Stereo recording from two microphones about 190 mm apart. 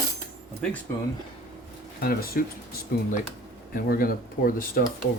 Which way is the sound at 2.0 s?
50° left (ahead or behind).